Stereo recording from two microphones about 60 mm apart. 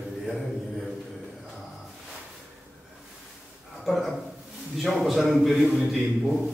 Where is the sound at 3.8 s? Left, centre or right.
Centre.